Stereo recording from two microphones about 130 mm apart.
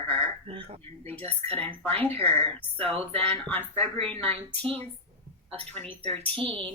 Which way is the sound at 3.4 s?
15° left (ahead or behind).